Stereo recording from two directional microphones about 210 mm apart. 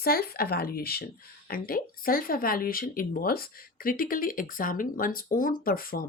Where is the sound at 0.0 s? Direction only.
45° left (ahead or behind).